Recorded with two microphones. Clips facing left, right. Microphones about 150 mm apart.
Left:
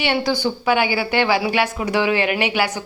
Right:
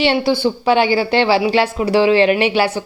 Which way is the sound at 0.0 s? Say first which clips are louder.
Right 5 dB; 30° right (ahead or behind).